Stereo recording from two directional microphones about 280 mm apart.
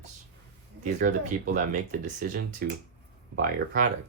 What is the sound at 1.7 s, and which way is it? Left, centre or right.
Speech, right.